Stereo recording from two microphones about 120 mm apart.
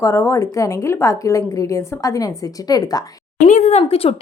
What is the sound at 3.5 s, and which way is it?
Speech, 75° left (ahead or behind).